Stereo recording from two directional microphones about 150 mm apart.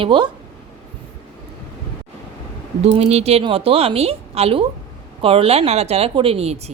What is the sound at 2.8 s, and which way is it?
Speech, 40° right (ahead or behind).